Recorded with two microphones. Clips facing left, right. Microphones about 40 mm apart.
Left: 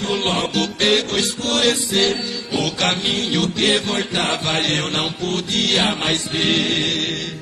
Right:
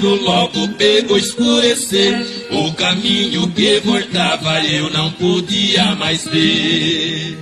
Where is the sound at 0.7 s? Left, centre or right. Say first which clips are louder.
Right 6 dB; right.